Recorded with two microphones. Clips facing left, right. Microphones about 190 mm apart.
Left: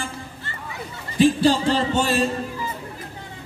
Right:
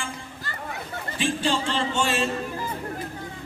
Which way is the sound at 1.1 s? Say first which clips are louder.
Left 9 dB; 40° left (ahead or behind).